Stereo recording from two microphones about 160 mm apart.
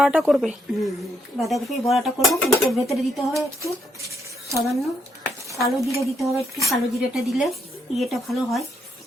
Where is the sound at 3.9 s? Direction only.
20° right (ahead or behind).